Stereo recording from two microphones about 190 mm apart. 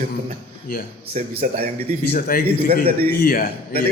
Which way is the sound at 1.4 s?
50° right (ahead or behind).